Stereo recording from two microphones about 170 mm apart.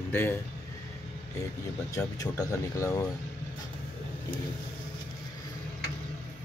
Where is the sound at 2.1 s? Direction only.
20° left (ahead or behind).